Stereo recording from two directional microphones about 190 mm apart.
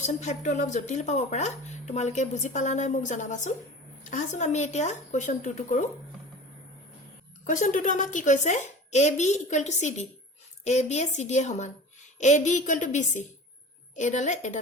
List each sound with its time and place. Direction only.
0.0 s speech: 40° left (ahead or behind)
7.4 s speech: 40° left (ahead or behind)